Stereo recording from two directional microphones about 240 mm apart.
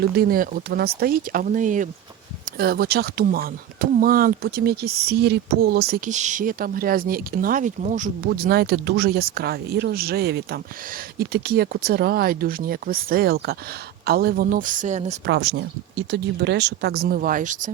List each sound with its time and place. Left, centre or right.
0.2 s speech: right
15.3 s speech: right